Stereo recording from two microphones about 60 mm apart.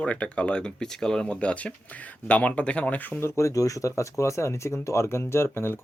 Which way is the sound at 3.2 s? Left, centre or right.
Left.